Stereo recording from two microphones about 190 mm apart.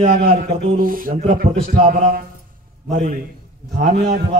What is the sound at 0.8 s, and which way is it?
A man's voice, 45° right (ahead or behind).